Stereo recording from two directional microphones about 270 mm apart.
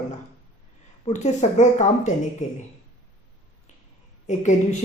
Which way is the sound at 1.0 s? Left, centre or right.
Left.